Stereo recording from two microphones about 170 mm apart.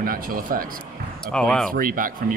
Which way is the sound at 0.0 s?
60° right (ahead or behind).